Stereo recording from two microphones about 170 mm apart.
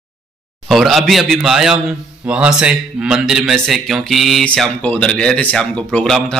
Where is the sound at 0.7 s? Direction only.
Centre (ahead or behind).